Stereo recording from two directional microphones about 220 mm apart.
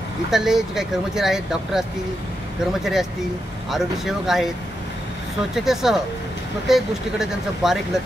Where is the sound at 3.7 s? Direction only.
Centre (ahead or behind).